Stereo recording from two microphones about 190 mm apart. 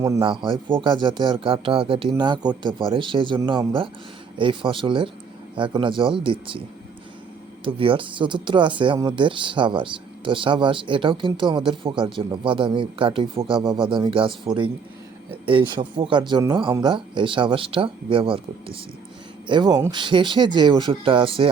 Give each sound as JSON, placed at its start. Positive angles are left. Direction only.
{"t": 0.0, "sound": "speech", "side_deg": -20}
{"t": 7.6, "sound": "speech", "side_deg": -30}